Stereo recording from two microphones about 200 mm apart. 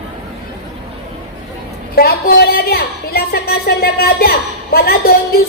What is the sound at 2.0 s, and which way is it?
A woman's voice, 50° left (ahead or behind).